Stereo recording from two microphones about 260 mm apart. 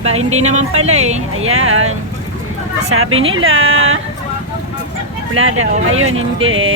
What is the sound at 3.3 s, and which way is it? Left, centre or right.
Speech, right.